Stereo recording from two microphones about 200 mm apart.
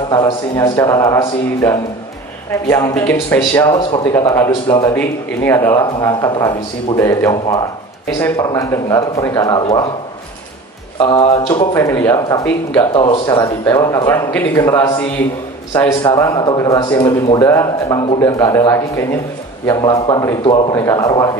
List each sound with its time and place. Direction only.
0.1 s a man's voice: 15° left (ahead or behind)
11.0 s a man's voice: 25° left (ahead or behind)
11.7 s a man's voice: 15° left (ahead or behind)
12.9 s a man's voice: 25° left (ahead or behind)